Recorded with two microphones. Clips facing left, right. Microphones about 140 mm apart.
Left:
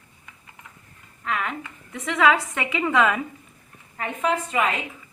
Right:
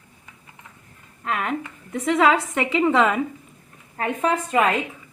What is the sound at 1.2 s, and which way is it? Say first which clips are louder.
A woman's voice: right 3 dB; 40° right (ahead or behind).